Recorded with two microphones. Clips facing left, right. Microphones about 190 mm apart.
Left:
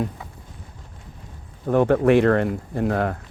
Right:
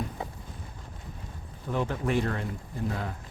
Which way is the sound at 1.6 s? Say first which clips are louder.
Left 13 dB; 55° left (ahead or behind).